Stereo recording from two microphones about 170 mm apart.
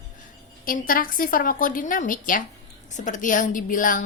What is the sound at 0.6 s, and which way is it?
A woman's voice, 55° left (ahead or behind).